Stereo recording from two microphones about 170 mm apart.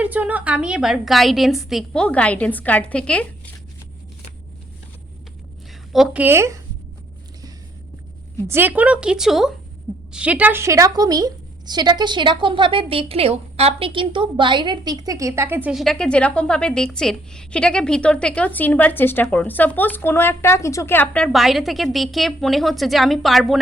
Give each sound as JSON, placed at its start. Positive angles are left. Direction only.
{"t": 0.0, "sound": "a woman's voice", "side_deg": -10}
{"t": 5.9, "sound": "speech", "side_deg": -5}
{"t": 8.4, "sound": "a woman's voice", "side_deg": -10}
{"t": 15.7, "sound": "a woman's voice", "side_deg": 0}